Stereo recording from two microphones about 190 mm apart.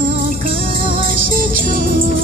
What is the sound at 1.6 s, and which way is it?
Music, 45° right (ahead or behind).